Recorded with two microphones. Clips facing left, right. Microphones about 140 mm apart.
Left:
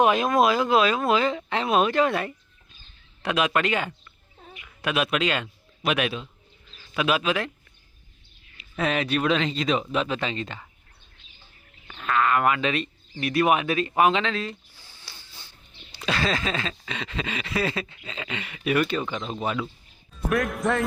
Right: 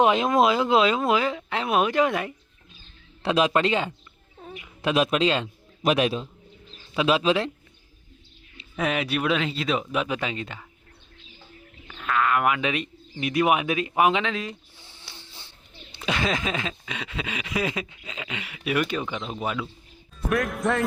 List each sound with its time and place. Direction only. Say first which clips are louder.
0.0 s speech: even; 20° right (ahead or behind)
3.2 s speech: right 2 dB; 30° right (ahead or behind)
8.7 s speech: left 1 dB; 10° right (ahead or behind)
11.9 s speech: left 1 dB; centre (ahead or behind)
14.8 s speech: right 2 dB; 25° right (ahead or behind); by 20.8 s centre (ahead or behind)